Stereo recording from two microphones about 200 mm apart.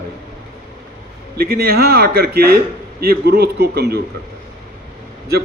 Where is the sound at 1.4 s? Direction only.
50° right (ahead or behind).